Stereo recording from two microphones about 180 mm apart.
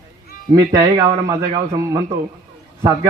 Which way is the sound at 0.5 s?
20° right (ahead or behind).